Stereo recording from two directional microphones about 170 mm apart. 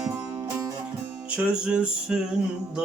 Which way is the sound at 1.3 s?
5° right (ahead or behind).